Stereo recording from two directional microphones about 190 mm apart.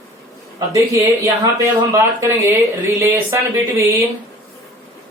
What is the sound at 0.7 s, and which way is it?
Speech, 15° right (ahead or behind).